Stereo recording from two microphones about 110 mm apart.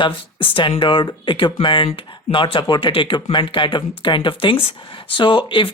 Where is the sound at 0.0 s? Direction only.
50° left (ahead or behind).